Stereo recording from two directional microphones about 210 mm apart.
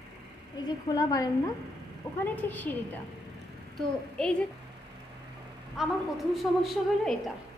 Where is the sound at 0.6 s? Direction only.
15° left (ahead or behind).